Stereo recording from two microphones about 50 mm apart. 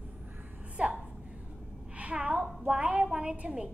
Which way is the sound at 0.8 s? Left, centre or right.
Right.